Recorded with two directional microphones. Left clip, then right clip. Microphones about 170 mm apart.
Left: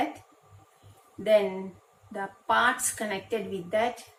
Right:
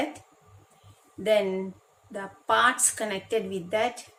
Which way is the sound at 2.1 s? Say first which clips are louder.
Right 1 dB; 75° right (ahead or behind).